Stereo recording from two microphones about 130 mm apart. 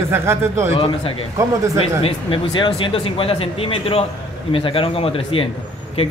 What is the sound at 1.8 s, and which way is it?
A man's voice, 45° left (ahead or behind).